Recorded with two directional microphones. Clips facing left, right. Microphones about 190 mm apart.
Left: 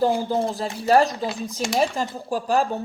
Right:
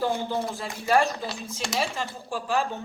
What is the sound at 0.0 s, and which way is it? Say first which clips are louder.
Speech: left 6 dB; 30° left (ahead or behind).